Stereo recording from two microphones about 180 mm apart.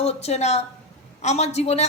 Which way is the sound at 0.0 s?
35° left (ahead or behind).